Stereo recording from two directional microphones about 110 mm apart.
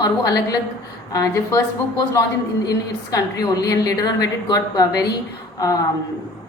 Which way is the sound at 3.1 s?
35° left (ahead or behind).